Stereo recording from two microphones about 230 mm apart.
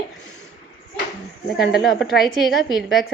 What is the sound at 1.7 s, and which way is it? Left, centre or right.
A woman's voice, centre.